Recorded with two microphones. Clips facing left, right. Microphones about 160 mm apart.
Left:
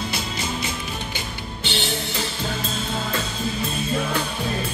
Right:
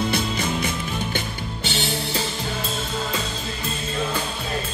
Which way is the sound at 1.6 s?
40° right (ahead or behind).